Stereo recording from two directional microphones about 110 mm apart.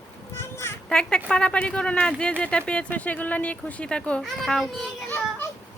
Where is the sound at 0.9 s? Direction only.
5° left (ahead or behind).